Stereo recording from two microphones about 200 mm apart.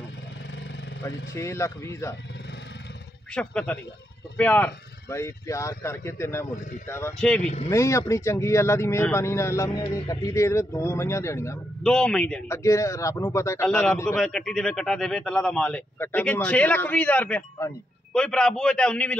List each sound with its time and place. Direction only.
1.3 s speech: 15° left (ahead or behind)
3.3 s speech: 5° left (ahead or behind)
7.4 s speech: 30° left (ahead or behind)
7.7 s speech: 15° left (ahead or behind)